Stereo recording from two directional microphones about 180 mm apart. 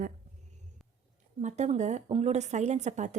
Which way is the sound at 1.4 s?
40° right (ahead or behind).